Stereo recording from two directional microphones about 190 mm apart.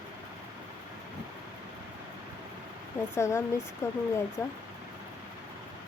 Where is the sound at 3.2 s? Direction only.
15° left (ahead or behind).